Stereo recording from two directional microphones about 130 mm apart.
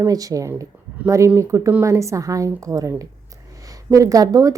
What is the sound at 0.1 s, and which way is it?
A woman's voice, 25° right (ahead or behind).